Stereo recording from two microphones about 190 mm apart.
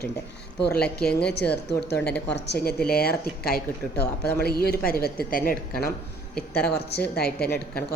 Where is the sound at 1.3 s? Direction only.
60° left (ahead or behind).